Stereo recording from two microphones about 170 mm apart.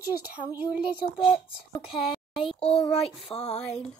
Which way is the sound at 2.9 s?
35° left (ahead or behind).